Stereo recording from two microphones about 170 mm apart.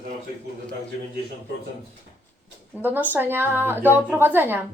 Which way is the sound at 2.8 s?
10° right (ahead or behind).